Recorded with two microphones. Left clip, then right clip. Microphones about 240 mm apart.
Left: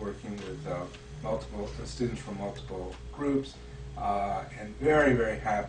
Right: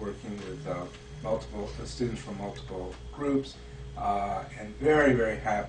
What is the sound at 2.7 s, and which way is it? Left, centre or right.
Speech, centre.